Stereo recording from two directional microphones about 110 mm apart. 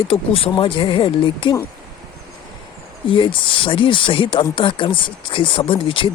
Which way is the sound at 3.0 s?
50° left (ahead or behind).